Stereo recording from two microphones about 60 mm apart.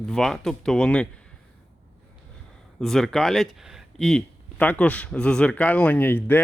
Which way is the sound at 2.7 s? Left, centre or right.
Centre.